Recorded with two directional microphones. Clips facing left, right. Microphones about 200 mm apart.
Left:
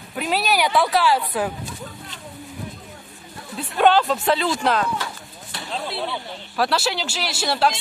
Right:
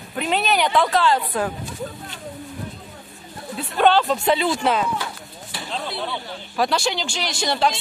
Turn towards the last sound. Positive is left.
turn(degrees=5)  # may be behind; listen again after turning